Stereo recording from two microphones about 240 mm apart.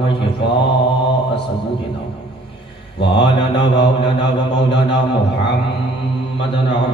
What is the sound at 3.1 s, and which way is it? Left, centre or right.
Mantra, left.